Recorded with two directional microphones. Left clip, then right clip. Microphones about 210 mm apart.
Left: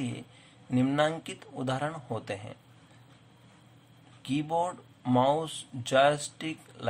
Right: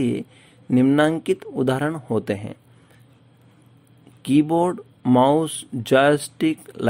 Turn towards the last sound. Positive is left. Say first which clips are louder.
# right 13 dB
turn(degrees=-45)  # may be behind; listen again after turning